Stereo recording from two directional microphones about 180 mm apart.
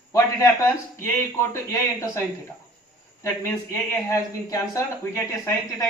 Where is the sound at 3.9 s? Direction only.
15° left (ahead or behind).